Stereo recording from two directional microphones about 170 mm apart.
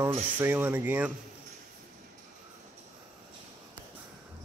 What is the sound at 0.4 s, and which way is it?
Rub, 10° right (ahead or behind).